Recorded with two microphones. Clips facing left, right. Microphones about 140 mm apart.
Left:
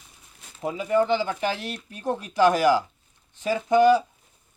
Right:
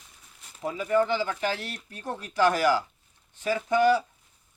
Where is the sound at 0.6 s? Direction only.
20° left (ahead or behind).